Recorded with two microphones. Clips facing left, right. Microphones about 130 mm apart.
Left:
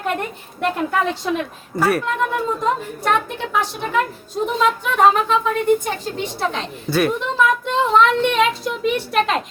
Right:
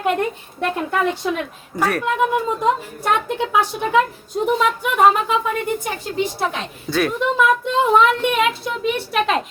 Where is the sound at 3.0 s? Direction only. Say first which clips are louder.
Even; 15° right (ahead or behind).